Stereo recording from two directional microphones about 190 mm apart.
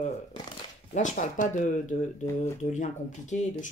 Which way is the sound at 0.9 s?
40° left (ahead or behind).